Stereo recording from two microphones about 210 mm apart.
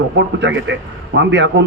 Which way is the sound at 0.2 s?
60° right (ahead or behind).